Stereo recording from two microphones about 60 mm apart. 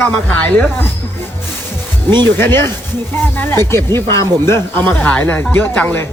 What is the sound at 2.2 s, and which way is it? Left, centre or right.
Speech, left.